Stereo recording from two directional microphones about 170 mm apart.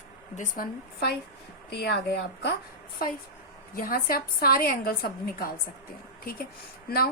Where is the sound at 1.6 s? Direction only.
75° left (ahead or behind).